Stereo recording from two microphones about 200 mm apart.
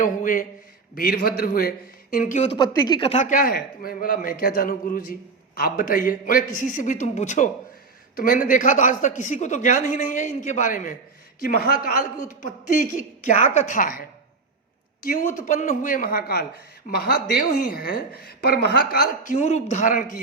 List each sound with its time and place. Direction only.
0.0 s a man's voice: 40° left (ahead or behind)
2.1 s a man's voice: 35° left (ahead or behind)
2.6 s a man's voice: 20° left (ahead or behind); by 14.0 s 40° left (ahead or behind)
15.0 s a man's voice: 40° left (ahead or behind)
19.4 s a man's voice: 35° left (ahead or behind)